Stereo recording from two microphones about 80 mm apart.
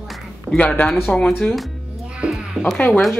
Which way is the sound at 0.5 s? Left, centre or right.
Centre.